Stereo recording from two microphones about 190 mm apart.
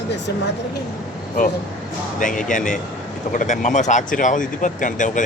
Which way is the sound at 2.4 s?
40° left (ahead or behind).